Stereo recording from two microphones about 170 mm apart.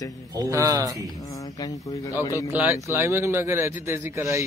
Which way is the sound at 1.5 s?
20° left (ahead or behind).